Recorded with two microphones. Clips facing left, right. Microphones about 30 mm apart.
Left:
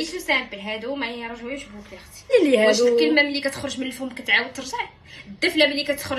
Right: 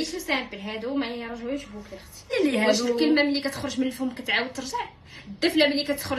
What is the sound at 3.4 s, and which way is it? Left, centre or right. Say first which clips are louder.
Speech: left 1 dB; left.